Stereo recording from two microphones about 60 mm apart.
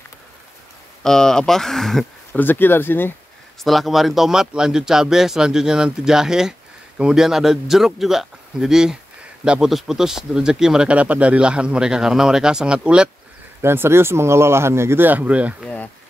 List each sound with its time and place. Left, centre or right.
1.0 s speech: centre
2.3 s speech: left
3.6 s speech: centre
13.6 s speech: right
15.0 s speech: right